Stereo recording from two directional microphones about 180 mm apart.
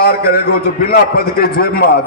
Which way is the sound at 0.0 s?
60° left (ahead or behind).